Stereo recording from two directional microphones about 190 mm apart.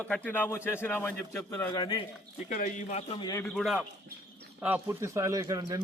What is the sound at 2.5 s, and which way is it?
Speech, 40° left (ahead or behind).